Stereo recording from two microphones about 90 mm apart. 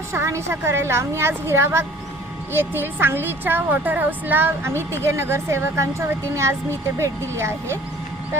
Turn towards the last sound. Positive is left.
turn(degrees=-30)  # may be behind; listen again after turning